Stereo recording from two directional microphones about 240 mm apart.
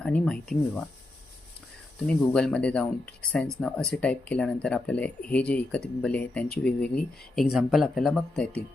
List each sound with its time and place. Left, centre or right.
0.0 s speech: centre
2.0 s speech: centre